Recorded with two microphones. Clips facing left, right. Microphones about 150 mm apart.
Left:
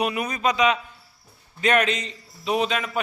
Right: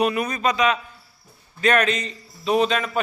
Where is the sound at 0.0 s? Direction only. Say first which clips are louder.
Right 2 dB; 15° left (ahead or behind).